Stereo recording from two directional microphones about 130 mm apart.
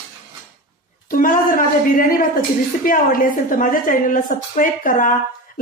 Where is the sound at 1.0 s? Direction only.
90° left.